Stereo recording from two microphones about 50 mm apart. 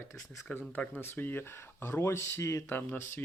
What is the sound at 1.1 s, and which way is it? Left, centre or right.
Speech, left.